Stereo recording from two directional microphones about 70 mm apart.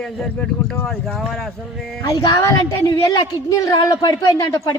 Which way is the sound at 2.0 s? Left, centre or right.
Left.